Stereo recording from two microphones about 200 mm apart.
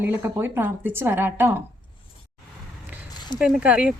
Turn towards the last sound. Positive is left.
turn(degrees=-5)  # may be behind; listen again after turning